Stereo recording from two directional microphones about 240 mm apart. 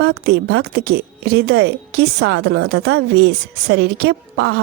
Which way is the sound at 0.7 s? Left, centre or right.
Right.